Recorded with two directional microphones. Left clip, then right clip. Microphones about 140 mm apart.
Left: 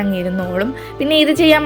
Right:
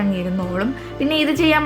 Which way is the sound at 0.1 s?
35° left (ahead or behind).